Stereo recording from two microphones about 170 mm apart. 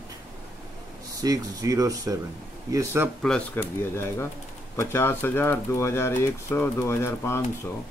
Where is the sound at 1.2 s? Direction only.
20° right (ahead or behind).